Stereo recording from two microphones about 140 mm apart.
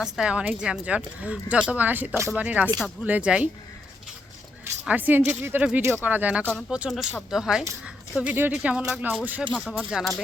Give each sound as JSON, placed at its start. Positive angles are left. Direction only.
{"t": 0.0, "sound": "speech", "side_deg": -5}
{"t": 4.6, "sound": "speech", "side_deg": -10}